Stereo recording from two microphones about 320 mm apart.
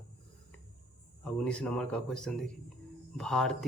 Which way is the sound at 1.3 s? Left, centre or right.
Centre.